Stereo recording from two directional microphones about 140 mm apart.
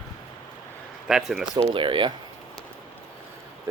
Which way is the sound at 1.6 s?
35° right (ahead or behind).